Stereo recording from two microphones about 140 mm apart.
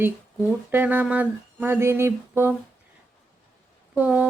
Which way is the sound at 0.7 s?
15° right (ahead or behind).